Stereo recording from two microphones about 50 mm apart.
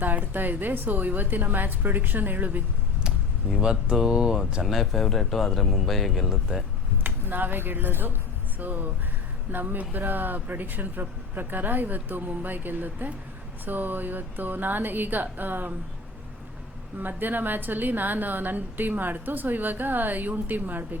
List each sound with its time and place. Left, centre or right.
0.0 s a woman's voice: right
3.6 s speech: centre
4.6 s speech: centre
7.0 s speech: right
8.5 s a woman's voice: right
17.0 s a woman's voice: right